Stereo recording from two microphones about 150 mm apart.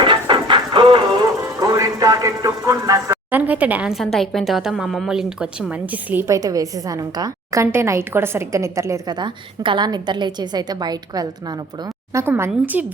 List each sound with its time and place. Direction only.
0.0 s music: 30° right (ahead or behind)
1.5 s speech: 25° right (ahead or behind)
12.2 s a woman's voice: 15° right (ahead or behind)